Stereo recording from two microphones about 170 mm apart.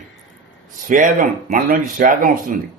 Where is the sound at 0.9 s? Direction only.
50° right (ahead or behind).